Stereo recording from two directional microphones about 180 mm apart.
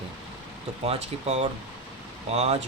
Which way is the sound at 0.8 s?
35° right (ahead or behind).